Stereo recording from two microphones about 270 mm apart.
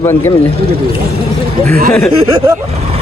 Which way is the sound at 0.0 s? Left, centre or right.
Centre.